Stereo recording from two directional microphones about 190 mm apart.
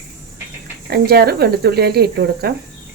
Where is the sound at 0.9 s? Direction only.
55° right (ahead or behind).